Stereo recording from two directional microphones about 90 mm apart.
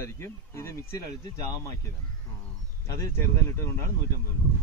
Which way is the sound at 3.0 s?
30° left (ahead or behind).